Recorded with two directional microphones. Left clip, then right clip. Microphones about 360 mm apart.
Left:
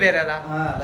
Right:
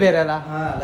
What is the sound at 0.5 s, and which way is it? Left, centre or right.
Speech, centre.